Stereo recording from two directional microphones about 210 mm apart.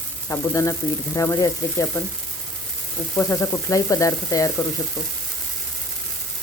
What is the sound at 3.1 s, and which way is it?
Speech, 15° left (ahead or behind).